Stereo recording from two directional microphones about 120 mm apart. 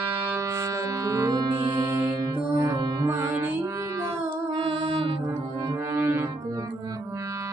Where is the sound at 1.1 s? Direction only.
30° right (ahead or behind).